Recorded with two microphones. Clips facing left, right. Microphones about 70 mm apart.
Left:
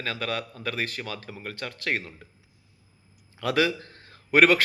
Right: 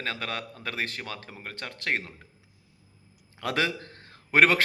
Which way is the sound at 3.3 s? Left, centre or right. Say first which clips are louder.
Left 4 dB; right.